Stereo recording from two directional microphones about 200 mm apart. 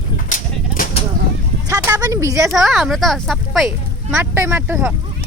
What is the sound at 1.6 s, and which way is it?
Speech, 15° right (ahead or behind).